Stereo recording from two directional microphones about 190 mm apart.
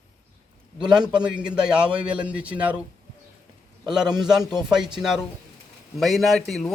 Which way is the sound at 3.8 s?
5° right (ahead or behind).